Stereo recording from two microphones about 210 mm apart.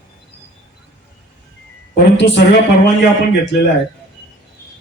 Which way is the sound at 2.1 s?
60° left (ahead or behind).